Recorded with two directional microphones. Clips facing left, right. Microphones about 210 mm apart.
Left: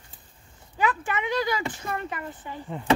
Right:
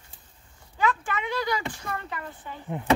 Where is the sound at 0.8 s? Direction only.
20° left (ahead or behind).